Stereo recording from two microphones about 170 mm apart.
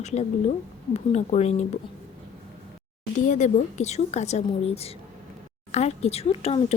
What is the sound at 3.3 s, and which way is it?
A woman's voice, 45° left (ahead or behind).